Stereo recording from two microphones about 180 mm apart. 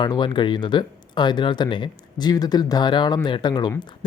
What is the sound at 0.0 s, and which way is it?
A man's voice, 25° left (ahead or behind).